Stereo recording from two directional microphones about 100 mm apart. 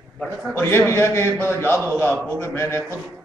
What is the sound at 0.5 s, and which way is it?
A man's voice, 25° left (ahead or behind).